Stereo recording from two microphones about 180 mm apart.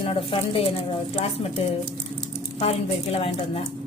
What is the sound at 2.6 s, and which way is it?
A woman's voice, 35° left (ahead or behind).